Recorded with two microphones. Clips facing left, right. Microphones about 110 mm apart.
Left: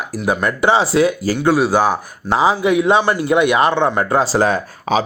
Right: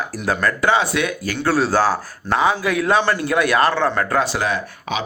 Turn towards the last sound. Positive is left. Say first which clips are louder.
# left 7 dB
turn(degrees=40)  # may be behind; listen again after turning